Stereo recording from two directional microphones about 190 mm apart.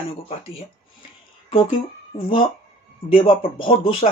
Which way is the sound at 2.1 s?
30° left (ahead or behind).